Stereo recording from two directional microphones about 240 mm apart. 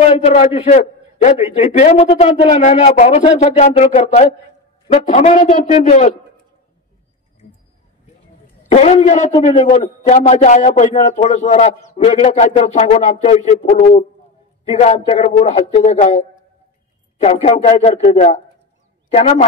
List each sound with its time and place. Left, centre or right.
0.0 s a man's voice: left
8.7 s a man's voice: left